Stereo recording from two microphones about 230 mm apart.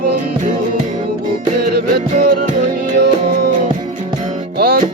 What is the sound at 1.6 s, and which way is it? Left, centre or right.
Music, right.